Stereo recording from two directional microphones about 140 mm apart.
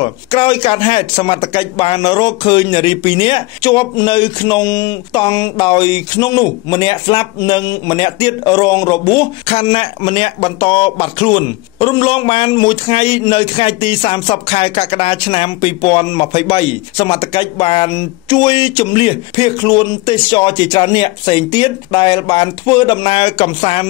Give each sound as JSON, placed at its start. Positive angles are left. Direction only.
{"t": 0.0, "sound": "speech", "side_deg": 35}